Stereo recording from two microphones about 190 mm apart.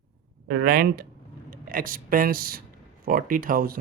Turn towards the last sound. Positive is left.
turn(degrees=-50)  # may be behind; listen again after turning